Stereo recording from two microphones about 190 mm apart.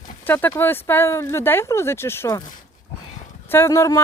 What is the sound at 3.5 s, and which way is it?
Speech, 15° left (ahead or behind).